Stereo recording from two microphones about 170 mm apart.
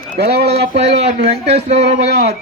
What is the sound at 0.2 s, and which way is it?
Speech, 70° right (ahead or behind).